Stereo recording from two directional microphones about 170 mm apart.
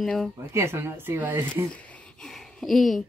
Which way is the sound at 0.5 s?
15° right (ahead or behind).